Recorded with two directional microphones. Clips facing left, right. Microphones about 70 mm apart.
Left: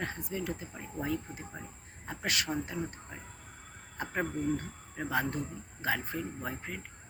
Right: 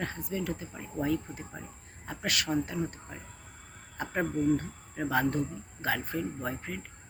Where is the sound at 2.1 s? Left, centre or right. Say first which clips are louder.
Right 1 dB; left.